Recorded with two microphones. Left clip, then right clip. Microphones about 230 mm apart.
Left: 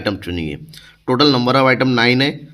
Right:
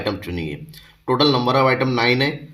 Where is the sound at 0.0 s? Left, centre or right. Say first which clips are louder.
Left 3 dB; left.